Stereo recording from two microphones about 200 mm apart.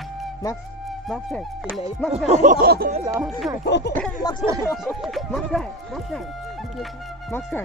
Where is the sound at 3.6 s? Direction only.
60° left (ahead or behind).